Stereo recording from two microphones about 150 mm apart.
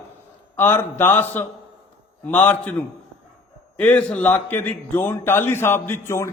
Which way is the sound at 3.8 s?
10° left (ahead or behind).